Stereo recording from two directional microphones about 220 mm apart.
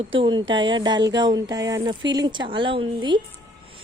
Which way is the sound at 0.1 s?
20° right (ahead or behind).